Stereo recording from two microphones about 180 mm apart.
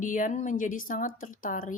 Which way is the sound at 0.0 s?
45° left (ahead or behind).